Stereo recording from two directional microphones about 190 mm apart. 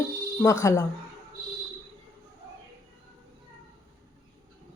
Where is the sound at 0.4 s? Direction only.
15° left (ahead or behind).